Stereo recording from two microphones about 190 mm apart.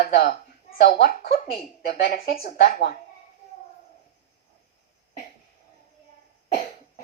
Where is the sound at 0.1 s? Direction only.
55° left (ahead or behind).